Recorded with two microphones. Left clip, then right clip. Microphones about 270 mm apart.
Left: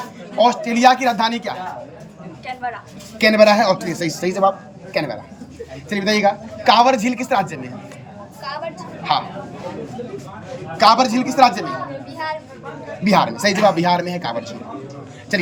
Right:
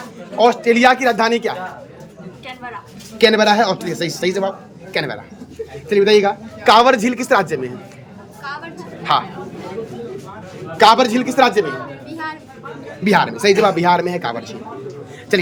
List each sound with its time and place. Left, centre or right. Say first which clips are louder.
0.3 s a man's voice: right 3 dB; centre
3.2 s speech: even; centre
4.2 s a man's voice: left 3 dB; right
4.9 s a man's voice: right 1 dB; centre
9.1 s a man's voice: right 3 dB; centre
10.8 s a man's voice: right 2 dB; centre
13.1 s a man's voice: right 2 dB; centre